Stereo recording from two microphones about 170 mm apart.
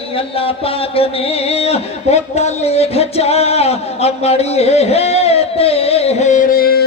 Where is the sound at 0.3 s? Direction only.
35° left (ahead or behind).